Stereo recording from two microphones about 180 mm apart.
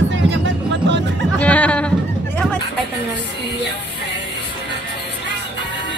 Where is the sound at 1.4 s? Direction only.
5° left (ahead or behind).